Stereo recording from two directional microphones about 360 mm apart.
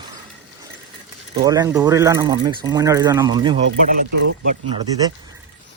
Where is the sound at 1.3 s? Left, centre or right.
Centre.